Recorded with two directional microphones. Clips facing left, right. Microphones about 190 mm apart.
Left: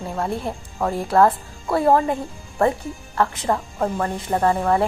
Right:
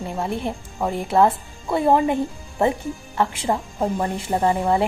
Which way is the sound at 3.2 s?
15° right (ahead or behind).